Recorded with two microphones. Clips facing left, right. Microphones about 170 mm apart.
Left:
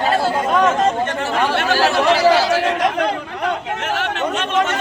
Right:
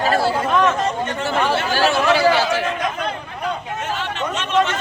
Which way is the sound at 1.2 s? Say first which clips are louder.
Left 1 dB; 65° left (ahead or behind).